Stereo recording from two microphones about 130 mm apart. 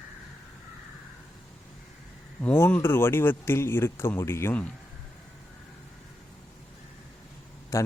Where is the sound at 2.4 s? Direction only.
15° left (ahead or behind).